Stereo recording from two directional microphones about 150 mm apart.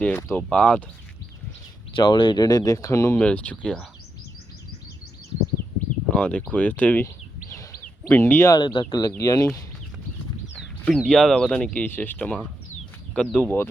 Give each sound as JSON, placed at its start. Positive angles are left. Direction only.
{"t": 0.0, "sound": "speech", "side_deg": 15}
{"t": 2.0, "sound": "speech", "side_deg": 35}
{"t": 3.2, "sound": "speech", "side_deg": 10}
{"t": 5.3, "sound": "bird", "side_deg": 35}
{"t": 6.1, "sound": "speech", "side_deg": 10}
{"t": 8.5, "sound": "speech", "side_deg": 35}
{"t": 10.8, "sound": "speech", "side_deg": 5}